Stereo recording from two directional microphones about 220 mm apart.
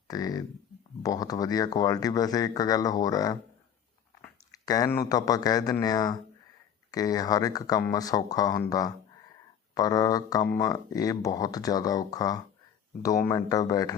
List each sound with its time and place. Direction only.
0.1 s speech: 15° left (ahead or behind)
9.7 s speech: 15° left (ahead or behind)